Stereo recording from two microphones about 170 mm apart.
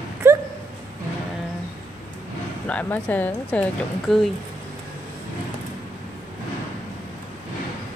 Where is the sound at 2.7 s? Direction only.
10° left (ahead or behind).